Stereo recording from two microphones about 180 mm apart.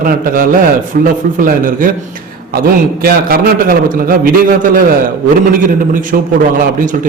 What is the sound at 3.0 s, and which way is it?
A man's voice, 55° right (ahead or behind).